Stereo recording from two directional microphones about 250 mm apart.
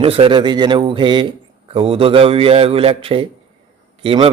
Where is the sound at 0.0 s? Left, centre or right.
Right.